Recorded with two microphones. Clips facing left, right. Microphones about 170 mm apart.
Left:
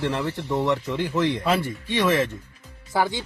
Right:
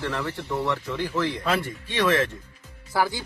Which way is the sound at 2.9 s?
20° left (ahead or behind).